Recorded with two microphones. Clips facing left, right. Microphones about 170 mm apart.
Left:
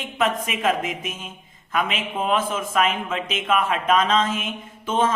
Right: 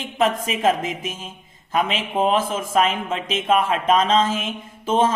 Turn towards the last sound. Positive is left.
turn(degrees=-35)  # may be behind; listen again after turning